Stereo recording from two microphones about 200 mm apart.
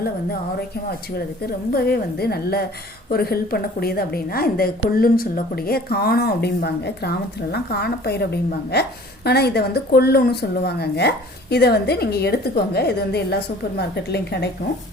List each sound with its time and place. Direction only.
1.7 s speech: 50° left (ahead or behind)